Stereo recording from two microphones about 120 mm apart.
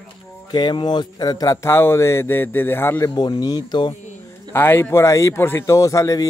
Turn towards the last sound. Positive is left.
turn(degrees=25)  # may be behind; listen again after turning